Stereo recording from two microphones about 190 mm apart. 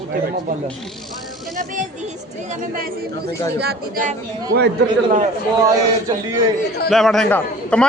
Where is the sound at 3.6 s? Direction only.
55° right (ahead or behind).